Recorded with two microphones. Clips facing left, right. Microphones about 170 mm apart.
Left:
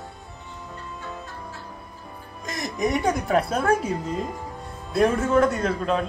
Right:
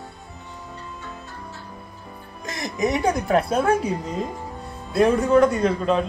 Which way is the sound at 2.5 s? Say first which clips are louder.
Right 1 dB; centre (ahead or behind).